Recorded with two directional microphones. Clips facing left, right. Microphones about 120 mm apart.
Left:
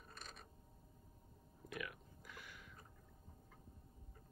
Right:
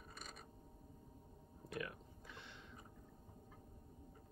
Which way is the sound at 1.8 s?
30° right (ahead or behind).